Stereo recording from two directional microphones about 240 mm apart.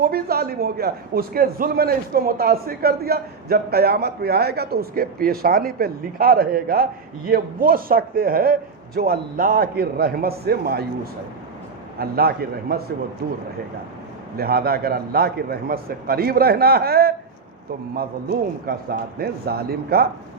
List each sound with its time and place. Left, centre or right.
0.0 s a man's voice: right
11.9 s a man's voice: right
14.3 s a man's voice: right
18.6 s a man's voice: right